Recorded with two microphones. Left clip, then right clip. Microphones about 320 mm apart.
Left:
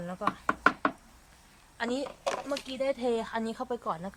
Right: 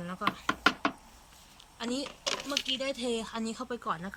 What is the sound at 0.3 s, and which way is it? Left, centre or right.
Knock, centre.